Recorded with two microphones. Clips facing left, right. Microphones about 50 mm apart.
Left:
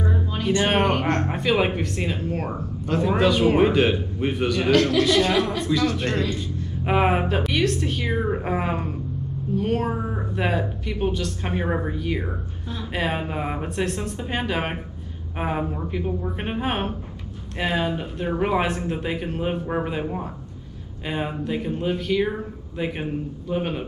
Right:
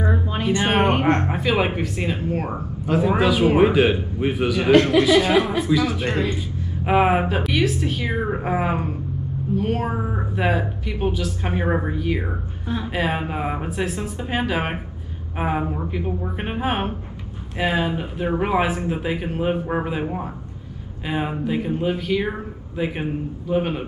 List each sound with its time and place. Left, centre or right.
0.0 s music: right
0.4 s speech: centre
0.8 s speech: right
1.3 s speech: centre
4.6 s speech: right
5.0 s speech: centre
12.2 s speech: centre
12.9 s speech: centre